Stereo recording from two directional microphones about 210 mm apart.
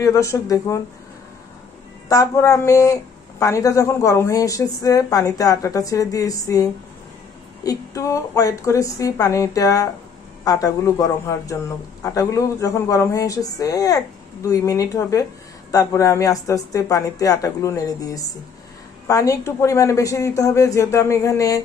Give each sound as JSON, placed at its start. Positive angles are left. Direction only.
{"t": 0.0, "sound": "speech", "side_deg": 15}
{"t": 2.0, "sound": "speech", "side_deg": 15}